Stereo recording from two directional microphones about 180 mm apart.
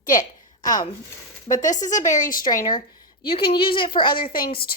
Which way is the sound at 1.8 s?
45° left (ahead or behind).